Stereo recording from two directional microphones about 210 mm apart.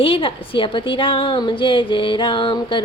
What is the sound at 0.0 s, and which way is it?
Speech, 25° left (ahead or behind).